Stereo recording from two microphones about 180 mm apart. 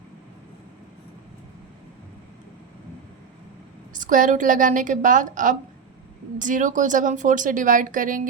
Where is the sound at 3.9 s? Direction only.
45° right (ahead or behind).